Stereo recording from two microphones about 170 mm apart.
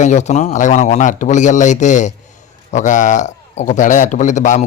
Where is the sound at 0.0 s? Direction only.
45° left (ahead or behind).